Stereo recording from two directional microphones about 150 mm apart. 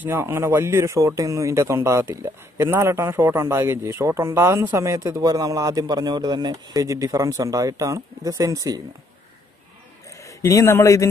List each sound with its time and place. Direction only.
0.0 s a man's voice: 15° right (ahead or behind)
10.2 s a man's voice: 20° left (ahead or behind)